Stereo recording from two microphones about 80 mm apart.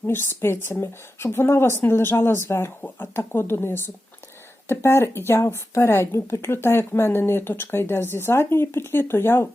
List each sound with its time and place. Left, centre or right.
0.1 s speech: left